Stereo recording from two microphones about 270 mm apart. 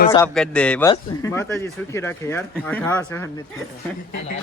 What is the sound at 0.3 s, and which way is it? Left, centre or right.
Speech, centre.